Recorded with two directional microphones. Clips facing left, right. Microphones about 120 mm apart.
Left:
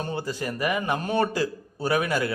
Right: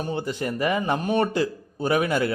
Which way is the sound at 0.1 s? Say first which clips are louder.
Right 2 dB; 25° right (ahead or behind).